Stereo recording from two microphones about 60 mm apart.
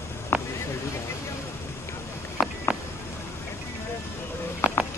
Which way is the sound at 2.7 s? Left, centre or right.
Centre.